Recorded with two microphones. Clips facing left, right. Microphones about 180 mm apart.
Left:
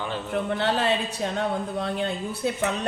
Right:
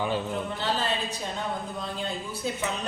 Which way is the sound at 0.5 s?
65° left (ahead or behind).